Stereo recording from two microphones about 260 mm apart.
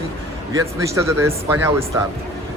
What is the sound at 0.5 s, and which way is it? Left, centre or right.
Speech, centre.